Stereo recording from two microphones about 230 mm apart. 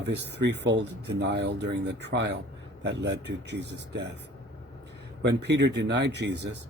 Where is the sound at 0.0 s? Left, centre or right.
Right.